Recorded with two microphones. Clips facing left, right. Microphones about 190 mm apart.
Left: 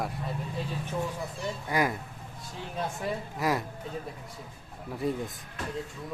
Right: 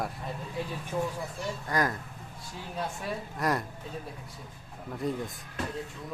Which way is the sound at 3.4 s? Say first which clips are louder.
Left 1 dB; 5° left (ahead or behind).